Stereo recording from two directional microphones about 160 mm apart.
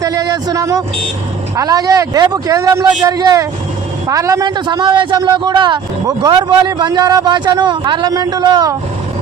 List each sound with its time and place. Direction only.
0.0 s a man's voice: 25° right (ahead or behind)